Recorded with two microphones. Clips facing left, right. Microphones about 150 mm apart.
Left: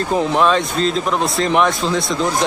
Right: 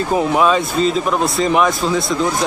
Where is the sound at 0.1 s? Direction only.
5° right (ahead or behind).